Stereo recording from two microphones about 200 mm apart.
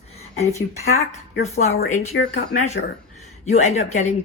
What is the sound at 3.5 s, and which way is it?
Speech, 35° left (ahead or behind).